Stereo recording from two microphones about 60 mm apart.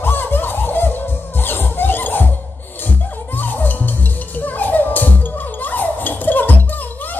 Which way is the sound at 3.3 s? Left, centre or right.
Left.